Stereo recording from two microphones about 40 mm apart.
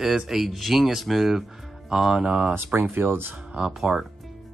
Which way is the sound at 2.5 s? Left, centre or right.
Right.